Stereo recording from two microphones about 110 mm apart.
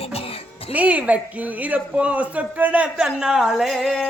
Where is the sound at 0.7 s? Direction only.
10° right (ahead or behind).